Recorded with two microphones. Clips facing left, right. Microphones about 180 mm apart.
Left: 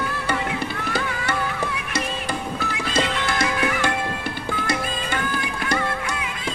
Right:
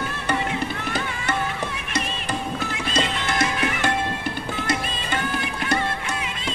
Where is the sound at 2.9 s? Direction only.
20° right (ahead or behind).